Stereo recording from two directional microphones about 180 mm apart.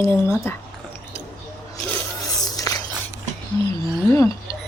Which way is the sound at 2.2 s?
20° left (ahead or behind).